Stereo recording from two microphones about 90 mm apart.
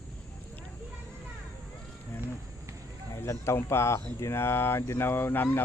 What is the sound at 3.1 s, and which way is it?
Speech, 30° left (ahead or behind).